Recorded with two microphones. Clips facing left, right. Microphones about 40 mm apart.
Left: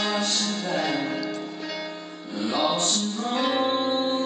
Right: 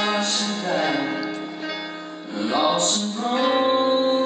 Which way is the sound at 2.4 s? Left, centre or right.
Right.